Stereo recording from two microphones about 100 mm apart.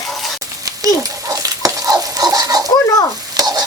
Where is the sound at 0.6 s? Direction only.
35° right (ahead or behind).